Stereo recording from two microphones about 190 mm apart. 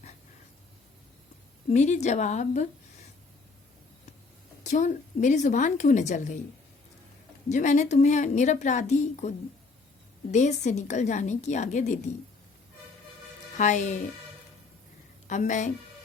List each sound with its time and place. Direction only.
1.7 s a woman's voice: 40° left (ahead or behind)
4.6 s a woman's voice: 40° left (ahead or behind)
7.5 s a woman's voice: 40° left (ahead or behind)
10.3 s a woman's voice: 40° left (ahead or behind)
13.6 s a woman's voice: 40° left (ahead or behind)
15.3 s a woman's voice: 40° left (ahead or behind)